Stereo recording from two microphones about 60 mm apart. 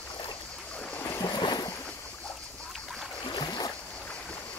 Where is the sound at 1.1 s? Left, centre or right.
Left.